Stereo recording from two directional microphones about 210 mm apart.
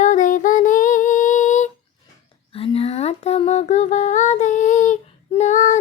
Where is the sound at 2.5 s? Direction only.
30° left (ahead or behind).